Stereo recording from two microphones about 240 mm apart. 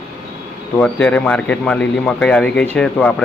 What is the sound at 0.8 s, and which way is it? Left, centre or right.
Speech, centre.